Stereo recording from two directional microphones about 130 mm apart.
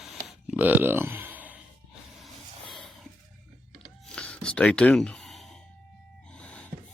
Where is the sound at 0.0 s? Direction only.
5° right (ahead or behind).